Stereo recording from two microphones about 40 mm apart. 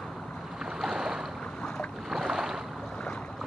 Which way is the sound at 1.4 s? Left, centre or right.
Centre.